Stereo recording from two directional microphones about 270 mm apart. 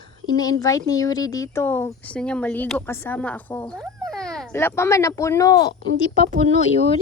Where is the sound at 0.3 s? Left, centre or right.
Centre.